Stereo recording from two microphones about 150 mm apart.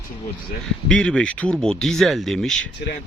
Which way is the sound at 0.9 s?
5° left (ahead or behind).